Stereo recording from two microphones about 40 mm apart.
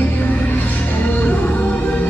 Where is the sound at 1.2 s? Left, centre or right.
Left.